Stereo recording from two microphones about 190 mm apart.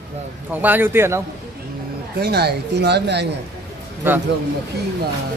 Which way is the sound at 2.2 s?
60° right (ahead or behind).